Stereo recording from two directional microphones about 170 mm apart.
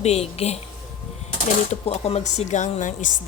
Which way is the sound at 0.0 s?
40° left (ahead or behind).